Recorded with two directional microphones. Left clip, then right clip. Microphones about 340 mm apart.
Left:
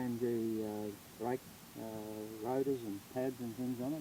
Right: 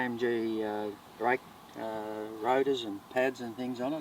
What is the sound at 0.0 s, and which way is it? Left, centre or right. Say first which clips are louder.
Speech: right 6 dB; centre.